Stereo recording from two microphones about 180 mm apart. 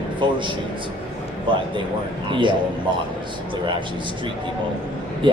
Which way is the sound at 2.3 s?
25° right (ahead or behind).